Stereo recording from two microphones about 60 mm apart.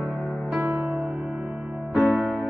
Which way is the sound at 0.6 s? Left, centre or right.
Right.